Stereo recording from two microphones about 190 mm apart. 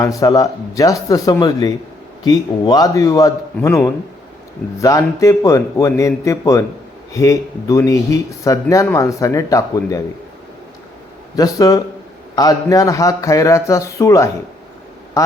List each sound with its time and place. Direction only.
0.0 s speech: 15° left (ahead or behind)
11.3 s speech: 20° left (ahead or behind)